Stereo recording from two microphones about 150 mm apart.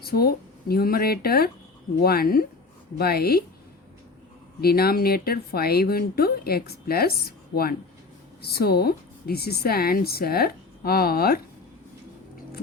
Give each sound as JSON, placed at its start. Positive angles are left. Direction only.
{"t": 0.0, "sound": "speech", "side_deg": 90}
{"t": 4.6, "sound": "speech", "side_deg": 90}